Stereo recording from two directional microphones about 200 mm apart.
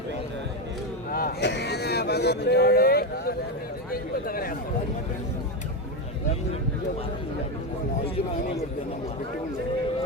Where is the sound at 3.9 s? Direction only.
45° left (ahead or behind).